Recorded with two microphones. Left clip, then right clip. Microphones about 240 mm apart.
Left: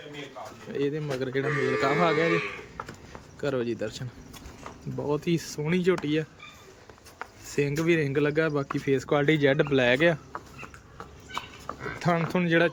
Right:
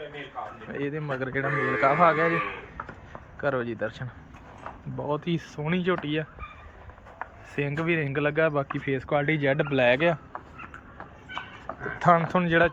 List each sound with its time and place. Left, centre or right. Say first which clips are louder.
0.7 s speech: left 3 dB; centre
2.7 s a sound: right 1 dB; centre
4.9 s speech: left 1 dB; centre
7.2 s a sound: left 3 dB; centre
7.8 s speech: left 1 dB; centre
11.9 s speech: right 6 dB; centre